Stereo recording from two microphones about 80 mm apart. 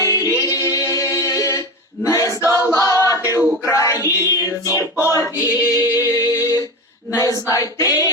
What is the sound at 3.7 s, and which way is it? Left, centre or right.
Music, left.